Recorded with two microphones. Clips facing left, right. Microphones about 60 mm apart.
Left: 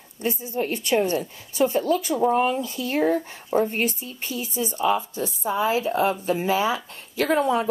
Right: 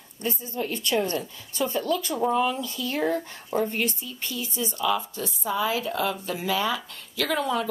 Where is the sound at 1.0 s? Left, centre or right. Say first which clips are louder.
Left 4 dB; left.